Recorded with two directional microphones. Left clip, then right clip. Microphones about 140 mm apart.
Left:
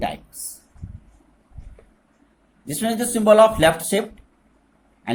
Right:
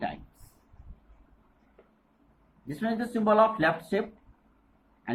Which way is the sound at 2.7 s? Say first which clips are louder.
Left 8 dB; 70° left (ahead or behind).